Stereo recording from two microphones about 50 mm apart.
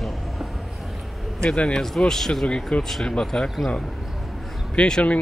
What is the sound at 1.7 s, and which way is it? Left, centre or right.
Speech, centre.